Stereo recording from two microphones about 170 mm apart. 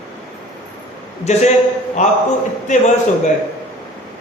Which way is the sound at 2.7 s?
45° left (ahead or behind).